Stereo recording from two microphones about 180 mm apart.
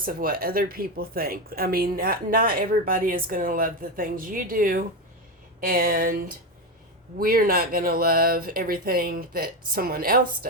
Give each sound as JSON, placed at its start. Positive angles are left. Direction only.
{"t": 0.0, "sound": "speech", "side_deg": -55}